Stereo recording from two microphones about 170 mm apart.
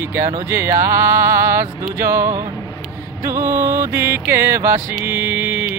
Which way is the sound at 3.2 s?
15° right (ahead or behind).